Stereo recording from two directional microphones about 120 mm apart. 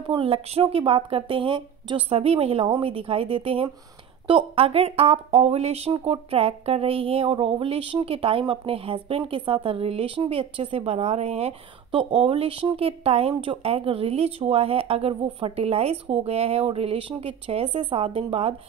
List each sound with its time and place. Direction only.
0.0 s speech: 50° right (ahead or behind)
5.9 s speech: 45° right (ahead or behind)
12.0 s speech: 50° right (ahead or behind)